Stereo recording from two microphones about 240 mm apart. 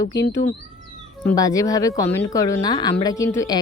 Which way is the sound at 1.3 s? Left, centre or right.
Centre.